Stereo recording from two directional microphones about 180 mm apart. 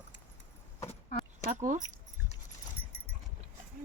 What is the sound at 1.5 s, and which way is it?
Speech, 45° right (ahead or behind).